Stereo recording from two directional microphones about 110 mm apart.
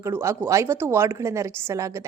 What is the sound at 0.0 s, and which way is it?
A woman's voice, 25° right (ahead or behind).